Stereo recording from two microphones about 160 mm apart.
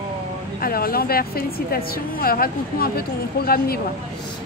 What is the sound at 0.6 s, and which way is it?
A woman's voice, 65° left (ahead or behind).